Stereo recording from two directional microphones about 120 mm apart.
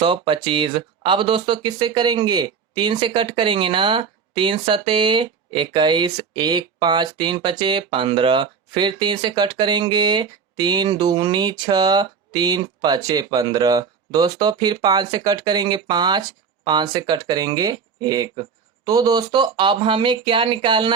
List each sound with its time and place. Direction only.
0.0 s speech: 45° right (ahead or behind)